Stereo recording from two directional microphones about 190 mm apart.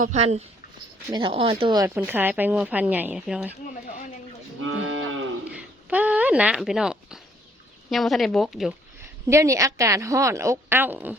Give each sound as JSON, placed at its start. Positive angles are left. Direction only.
{"t": 0.0, "sound": "speech", "side_deg": -35}
{"t": 2.0, "sound": "a woman's voice", "side_deg": -10}
{"t": 3.5, "sound": "speech", "side_deg": 40}
{"t": 4.6, "sound": "moo", "side_deg": -90}
{"t": 5.5, "sound": "speech", "side_deg": -10}
{"t": 9.2, "sound": "a woman's voice", "side_deg": -15}